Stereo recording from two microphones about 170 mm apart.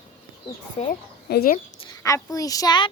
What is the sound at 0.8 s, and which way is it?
Speech, 40° left (ahead or behind).